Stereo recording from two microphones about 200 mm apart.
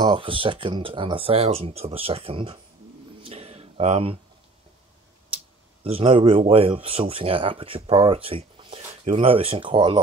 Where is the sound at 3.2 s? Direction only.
30° right (ahead or behind).